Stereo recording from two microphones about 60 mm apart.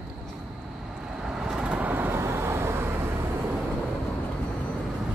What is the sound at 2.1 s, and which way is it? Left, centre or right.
Vehicle, right.